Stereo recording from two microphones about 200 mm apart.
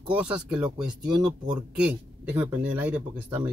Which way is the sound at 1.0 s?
20° right (ahead or behind).